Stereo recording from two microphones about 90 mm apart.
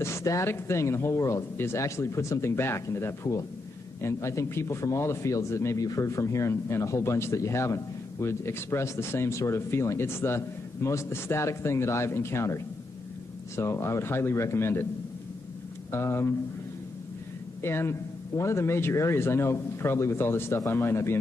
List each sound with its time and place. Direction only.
0.0 s a man's voice: 35° left (ahead or behind)
15.9 s a man's voice: 30° left (ahead or behind)
17.6 s a man's voice: 30° left (ahead or behind)